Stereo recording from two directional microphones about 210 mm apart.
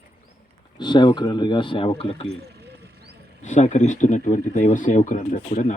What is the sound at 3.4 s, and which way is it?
Speech, 35° left (ahead or behind).